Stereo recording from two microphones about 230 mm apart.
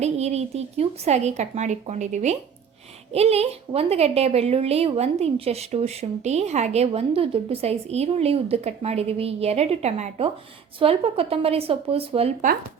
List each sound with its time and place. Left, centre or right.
0.0 s a woman's voice: right